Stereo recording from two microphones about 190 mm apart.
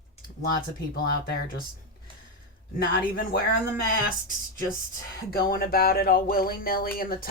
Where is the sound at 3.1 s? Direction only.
50° left (ahead or behind).